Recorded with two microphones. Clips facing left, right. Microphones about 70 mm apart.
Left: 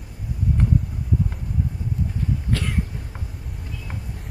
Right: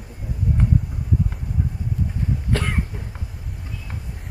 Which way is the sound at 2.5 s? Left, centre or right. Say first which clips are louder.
Right 4 dB; right.